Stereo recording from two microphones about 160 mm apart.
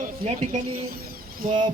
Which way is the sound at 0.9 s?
70° right (ahead or behind).